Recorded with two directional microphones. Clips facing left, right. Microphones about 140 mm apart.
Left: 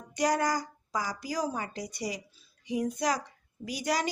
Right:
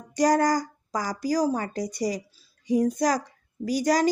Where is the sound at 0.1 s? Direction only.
40° right (ahead or behind).